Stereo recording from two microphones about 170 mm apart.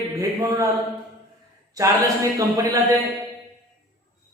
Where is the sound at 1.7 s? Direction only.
20° right (ahead or behind).